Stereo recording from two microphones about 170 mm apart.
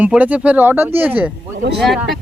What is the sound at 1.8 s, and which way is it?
Speech, centre (ahead or behind).